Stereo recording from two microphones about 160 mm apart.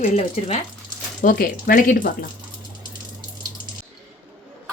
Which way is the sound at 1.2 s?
60° left (ahead or behind).